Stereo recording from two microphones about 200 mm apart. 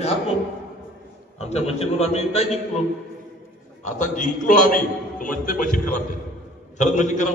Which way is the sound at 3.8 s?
40° left (ahead or behind).